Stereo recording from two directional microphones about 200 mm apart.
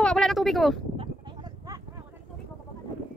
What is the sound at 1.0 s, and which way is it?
Sheep, 20° right (ahead or behind).